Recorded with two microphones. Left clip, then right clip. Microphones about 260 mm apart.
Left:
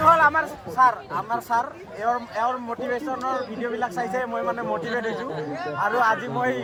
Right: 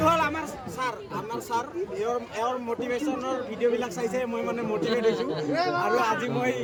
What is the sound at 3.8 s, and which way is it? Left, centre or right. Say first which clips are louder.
Speech: left 3 dB; centre.